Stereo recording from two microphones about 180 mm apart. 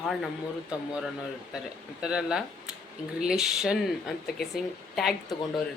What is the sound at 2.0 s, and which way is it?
Speech, 5° right (ahead or behind).